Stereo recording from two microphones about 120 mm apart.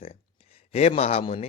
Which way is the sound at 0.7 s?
65° left (ahead or behind).